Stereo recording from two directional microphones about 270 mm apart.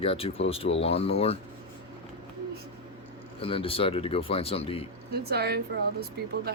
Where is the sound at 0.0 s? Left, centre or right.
Left.